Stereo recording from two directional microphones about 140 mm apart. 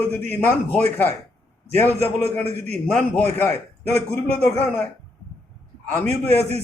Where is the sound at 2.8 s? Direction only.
10° left (ahead or behind).